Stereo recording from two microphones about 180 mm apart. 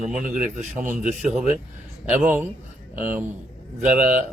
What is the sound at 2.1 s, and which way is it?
A man's voice, 5° right (ahead or behind).